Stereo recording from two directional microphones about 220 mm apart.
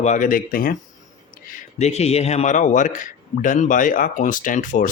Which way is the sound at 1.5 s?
30° left (ahead or behind).